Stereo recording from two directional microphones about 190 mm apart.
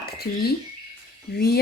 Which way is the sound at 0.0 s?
55° left (ahead or behind).